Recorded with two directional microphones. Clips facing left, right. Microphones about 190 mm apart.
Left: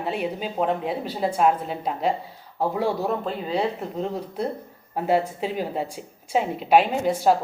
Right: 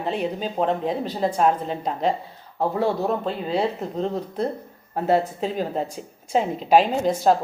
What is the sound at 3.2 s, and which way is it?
Speech, 30° right (ahead or behind).